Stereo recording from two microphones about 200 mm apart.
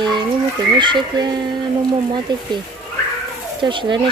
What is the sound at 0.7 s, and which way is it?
Speech, 25° right (ahead or behind).